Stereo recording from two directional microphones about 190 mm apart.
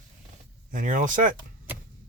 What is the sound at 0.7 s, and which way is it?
Speech, 40° right (ahead or behind).